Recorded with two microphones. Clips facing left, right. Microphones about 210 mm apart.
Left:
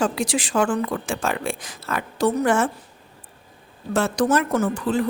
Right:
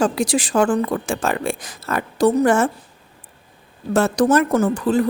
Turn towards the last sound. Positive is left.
turn(degrees=-40)  # may be behind; listen again after turning